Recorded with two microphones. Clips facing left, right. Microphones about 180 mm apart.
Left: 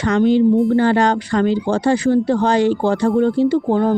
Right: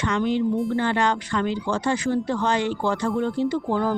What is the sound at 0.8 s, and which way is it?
Speech, 35° left (ahead or behind).